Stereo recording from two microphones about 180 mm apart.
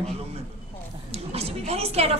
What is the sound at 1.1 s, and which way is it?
A woman's voice, 35° right (ahead or behind).